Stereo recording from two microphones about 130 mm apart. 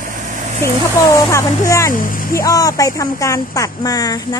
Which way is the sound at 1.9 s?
90° left.